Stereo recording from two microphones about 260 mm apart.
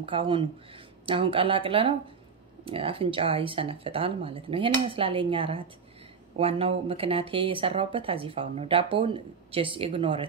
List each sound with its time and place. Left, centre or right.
0.0 s speech: centre